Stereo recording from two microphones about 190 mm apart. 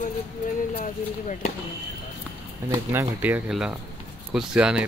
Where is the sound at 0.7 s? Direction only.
40° left (ahead or behind).